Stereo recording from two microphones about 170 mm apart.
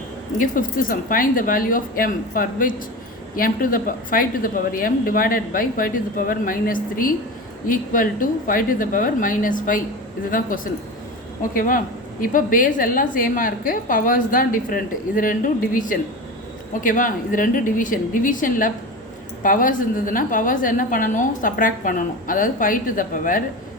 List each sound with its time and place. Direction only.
0.3 s a woman's voice: 55° left (ahead or behind)